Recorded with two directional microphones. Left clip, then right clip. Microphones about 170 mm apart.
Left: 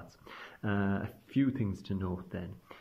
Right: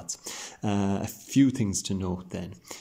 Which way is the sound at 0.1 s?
20° right (ahead or behind).